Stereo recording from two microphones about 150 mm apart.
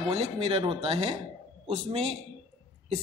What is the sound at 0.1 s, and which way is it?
A man's voice, 45° right (ahead or behind).